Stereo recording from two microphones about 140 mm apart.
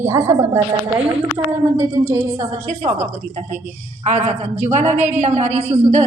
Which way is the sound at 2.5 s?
55° right (ahead or behind).